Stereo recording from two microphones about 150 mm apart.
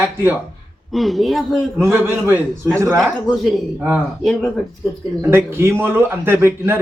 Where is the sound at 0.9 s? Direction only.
Centre (ahead or behind).